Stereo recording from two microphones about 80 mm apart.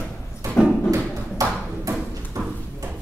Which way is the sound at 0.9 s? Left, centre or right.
Right.